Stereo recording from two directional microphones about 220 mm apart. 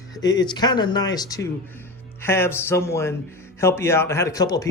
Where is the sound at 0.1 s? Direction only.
15° left (ahead or behind).